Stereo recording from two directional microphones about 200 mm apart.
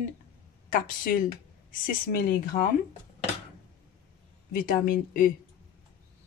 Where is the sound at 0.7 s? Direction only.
45° left (ahead or behind).